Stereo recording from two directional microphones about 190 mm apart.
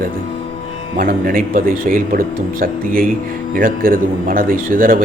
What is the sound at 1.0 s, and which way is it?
Speech, 50° right (ahead or behind).